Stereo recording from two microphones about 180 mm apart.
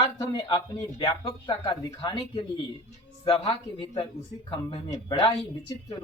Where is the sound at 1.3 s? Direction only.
25° left (ahead or behind).